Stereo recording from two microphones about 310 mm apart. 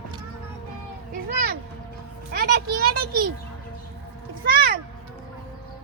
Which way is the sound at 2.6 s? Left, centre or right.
Right.